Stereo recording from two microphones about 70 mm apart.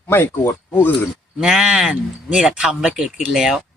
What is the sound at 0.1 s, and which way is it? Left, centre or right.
Speech, left.